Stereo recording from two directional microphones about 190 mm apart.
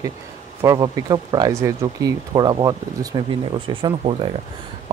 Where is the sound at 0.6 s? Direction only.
20° right (ahead or behind).